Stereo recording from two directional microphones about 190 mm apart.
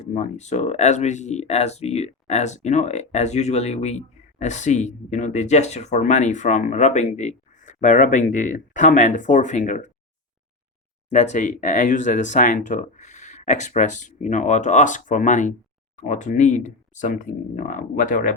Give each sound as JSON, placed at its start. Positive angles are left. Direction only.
{"t": 0.0, "sound": "speech", "side_deg": 35}
{"t": 11.1, "sound": "speech", "side_deg": 40}